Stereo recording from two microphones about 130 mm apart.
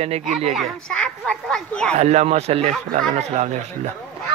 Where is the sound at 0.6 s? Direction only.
5° left (ahead or behind).